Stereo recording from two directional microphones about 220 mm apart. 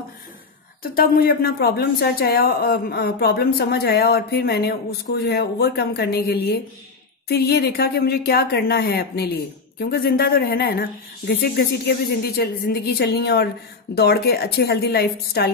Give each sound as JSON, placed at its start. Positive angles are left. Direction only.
{"t": 0.8, "sound": "speech", "side_deg": 40}